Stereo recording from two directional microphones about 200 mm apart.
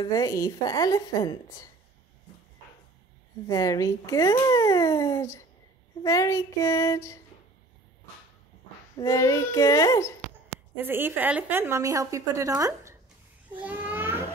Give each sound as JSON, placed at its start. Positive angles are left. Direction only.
{"t": 0.0, "sound": "speech", "side_deg": 20}
{"t": 3.4, "sound": "speech", "side_deg": 15}
{"t": 8.9, "sound": "speech", "side_deg": 15}
{"t": 10.8, "sound": "a woman's voice", "side_deg": -10}
{"t": 13.6, "sound": "a sound", "side_deg": -10}